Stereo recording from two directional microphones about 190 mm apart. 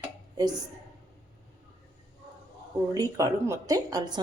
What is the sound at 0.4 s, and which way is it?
Speech, 20° right (ahead or behind).